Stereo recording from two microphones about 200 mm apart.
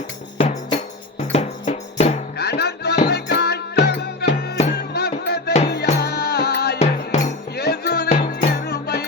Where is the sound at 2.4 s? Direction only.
55° left (ahead or behind).